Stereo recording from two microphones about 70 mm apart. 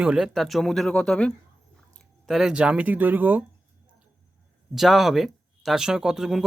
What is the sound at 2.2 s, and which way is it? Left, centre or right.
Speech, centre.